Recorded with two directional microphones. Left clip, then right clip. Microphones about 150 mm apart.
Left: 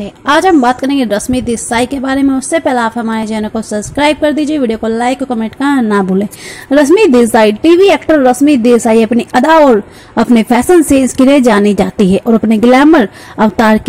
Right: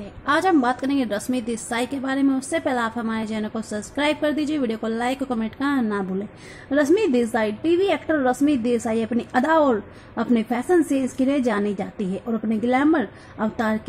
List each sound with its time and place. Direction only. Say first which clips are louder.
0.0 s a woman's voice: left 11 dB; 30° left (ahead or behind)